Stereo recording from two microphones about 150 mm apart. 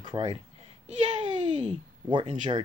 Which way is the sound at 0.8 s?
45° right (ahead or behind).